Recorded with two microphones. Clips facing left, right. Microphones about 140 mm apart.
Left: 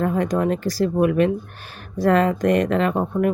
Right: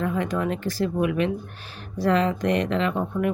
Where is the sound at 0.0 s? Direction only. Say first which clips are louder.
Left 5 dB; 40° left (ahead or behind).